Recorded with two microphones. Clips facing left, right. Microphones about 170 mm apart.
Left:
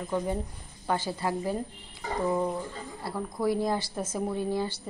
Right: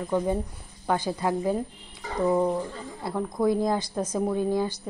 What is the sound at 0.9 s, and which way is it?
Speech, 15° right (ahead or behind).